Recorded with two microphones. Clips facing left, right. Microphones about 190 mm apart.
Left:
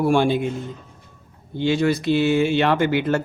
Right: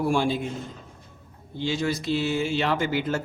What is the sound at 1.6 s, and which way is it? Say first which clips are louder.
A man's voice: left 7 dB; 65° left (ahead or behind).